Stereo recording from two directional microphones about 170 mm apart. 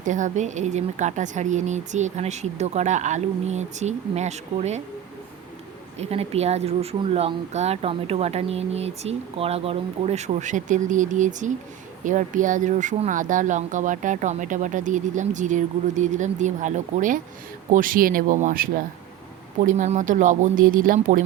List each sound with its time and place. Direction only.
0.0 s speech: 45° right (ahead or behind)
6.0 s speech: 40° right (ahead or behind)